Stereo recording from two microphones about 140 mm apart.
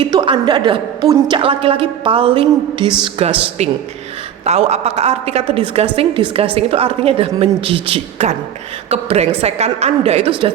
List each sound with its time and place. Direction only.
0.0 s a woman's voice: 35° right (ahead or behind)